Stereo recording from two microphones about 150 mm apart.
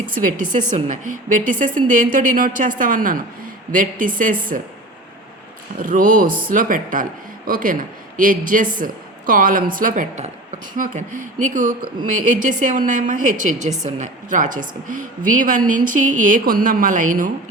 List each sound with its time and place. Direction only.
0.5 s speech: 55° right (ahead or behind)
5.8 s speech: 65° right (ahead or behind)